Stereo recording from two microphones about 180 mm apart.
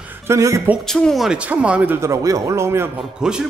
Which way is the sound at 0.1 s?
15° right (ahead or behind).